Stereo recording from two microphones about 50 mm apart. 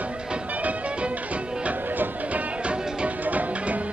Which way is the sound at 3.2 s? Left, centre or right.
Right.